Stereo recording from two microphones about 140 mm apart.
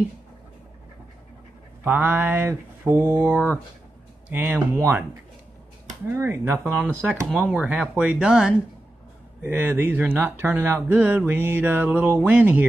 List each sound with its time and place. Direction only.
1.9 s speech: 15° right (ahead or behind)
6.0 s speech: 15° right (ahead or behind)